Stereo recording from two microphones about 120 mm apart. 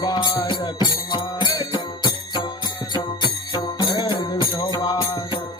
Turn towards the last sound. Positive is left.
turn(degrees=30)  # may be behind; listen again after turning